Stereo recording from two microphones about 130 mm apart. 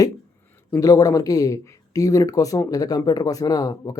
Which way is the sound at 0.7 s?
25° left (ahead or behind).